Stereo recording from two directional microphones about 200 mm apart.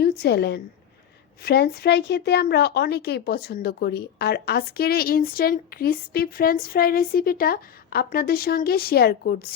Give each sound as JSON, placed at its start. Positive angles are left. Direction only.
{"t": 0.0, "sound": "a woman's voice", "side_deg": 55}